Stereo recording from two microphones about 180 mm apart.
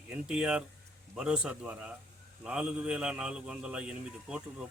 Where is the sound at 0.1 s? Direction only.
5° right (ahead or behind).